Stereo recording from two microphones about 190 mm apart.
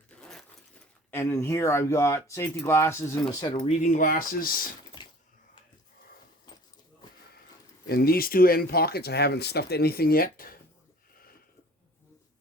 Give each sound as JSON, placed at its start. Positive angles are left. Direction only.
{"t": 0.2, "sound": "keys jangling", "side_deg": 0}
{"t": 1.1, "sound": "speech", "side_deg": 15}
{"t": 3.4, "sound": "speech", "side_deg": 25}
{"t": 3.8, "sound": "speech", "side_deg": 40}
{"t": 5.0, "sound": "a sound", "side_deg": 25}
{"t": 7.9, "sound": "speech", "side_deg": 55}